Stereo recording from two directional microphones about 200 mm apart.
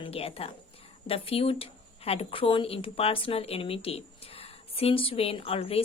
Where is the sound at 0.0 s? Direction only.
30° left (ahead or behind).